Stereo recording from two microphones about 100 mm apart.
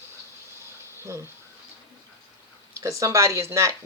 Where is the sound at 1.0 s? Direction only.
25° right (ahead or behind).